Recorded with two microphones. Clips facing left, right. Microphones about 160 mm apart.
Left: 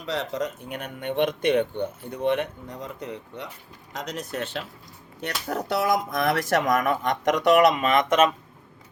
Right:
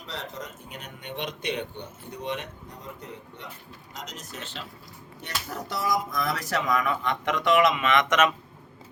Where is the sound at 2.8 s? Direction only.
85° left.